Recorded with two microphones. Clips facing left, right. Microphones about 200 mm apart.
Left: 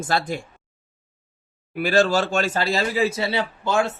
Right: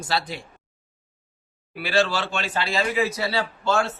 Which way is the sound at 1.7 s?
45° left (ahead or behind).